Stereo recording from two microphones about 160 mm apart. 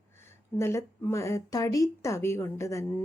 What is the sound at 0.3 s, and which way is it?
Speech, 15° left (ahead or behind).